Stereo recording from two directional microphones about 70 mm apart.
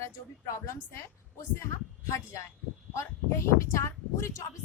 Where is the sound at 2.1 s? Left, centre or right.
Left.